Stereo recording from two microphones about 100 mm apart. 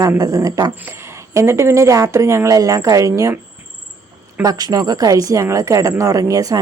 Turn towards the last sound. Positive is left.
turn(degrees=-35)  # may be behind; listen again after turning